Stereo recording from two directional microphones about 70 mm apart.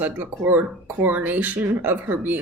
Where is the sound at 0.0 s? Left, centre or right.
Right.